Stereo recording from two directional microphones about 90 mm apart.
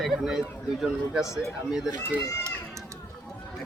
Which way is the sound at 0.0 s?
5° right (ahead or behind).